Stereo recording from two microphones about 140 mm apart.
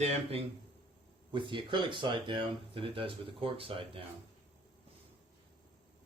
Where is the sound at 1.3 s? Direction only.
35° right (ahead or behind).